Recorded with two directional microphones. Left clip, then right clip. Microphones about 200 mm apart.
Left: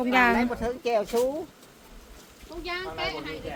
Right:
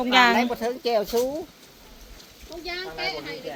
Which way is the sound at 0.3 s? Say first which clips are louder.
Right 3 dB; 35° right (ahead or behind).